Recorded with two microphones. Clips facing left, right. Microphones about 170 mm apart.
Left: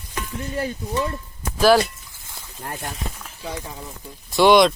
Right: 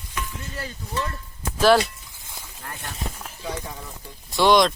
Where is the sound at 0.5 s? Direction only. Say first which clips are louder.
Left 6 dB; 25° left (ahead or behind).